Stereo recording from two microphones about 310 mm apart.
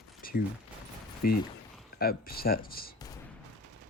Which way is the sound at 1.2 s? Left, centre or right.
Left.